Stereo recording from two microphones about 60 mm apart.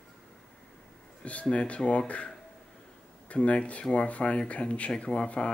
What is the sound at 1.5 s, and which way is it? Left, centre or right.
Speech, left.